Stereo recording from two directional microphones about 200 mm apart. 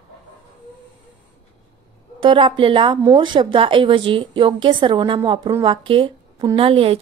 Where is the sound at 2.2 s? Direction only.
25° right (ahead or behind).